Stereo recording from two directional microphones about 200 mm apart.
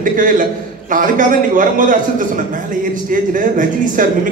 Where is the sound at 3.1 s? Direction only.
40° right (ahead or behind).